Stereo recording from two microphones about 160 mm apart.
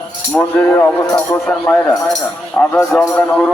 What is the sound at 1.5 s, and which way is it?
A man's voice, 5° left (ahead or behind).